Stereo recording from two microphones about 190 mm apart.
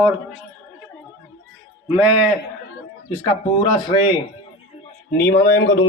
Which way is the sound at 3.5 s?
25° left (ahead or behind).